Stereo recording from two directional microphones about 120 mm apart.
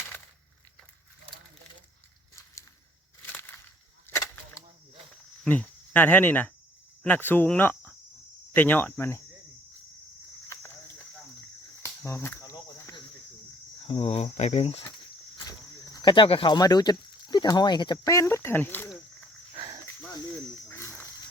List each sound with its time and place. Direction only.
3.2 s crushing: 15° left (ahead or behind)
4.1 s a sound: 30° left (ahead or behind)
5.5 s speech: 15° left (ahead or behind)
8.5 s cricket: 15° left (ahead or behind)
11.8 s cricket: 20° left (ahead or behind)
13.8 s speech: 60° left (ahead or behind)
15.4 s speech: 35° left (ahead or behind); by 18.9 s 20° left (ahead or behind)
20.7 s a sound: 20° left (ahead or behind)